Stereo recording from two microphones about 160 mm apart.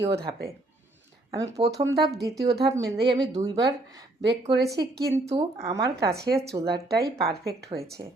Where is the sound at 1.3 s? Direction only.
20° right (ahead or behind).